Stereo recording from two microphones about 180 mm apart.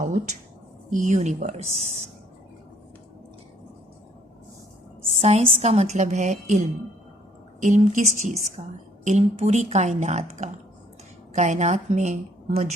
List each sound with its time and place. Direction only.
0.9 s a woman's voice: 45° right (ahead or behind)
5.2 s a woman's voice: 35° right (ahead or behind)